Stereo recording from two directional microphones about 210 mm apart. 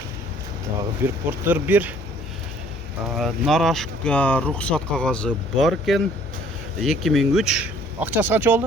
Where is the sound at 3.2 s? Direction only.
Centre (ahead or behind).